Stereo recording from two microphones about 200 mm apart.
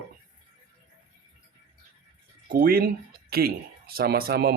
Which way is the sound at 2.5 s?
45° right (ahead or behind).